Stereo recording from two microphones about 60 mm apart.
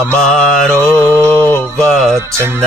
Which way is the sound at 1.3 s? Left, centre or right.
Left.